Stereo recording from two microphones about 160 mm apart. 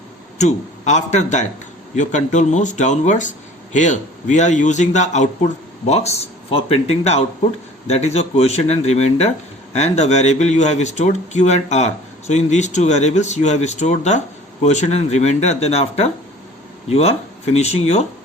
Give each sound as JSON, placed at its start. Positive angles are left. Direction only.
{"t": 0.3, "sound": "speech", "side_deg": 45}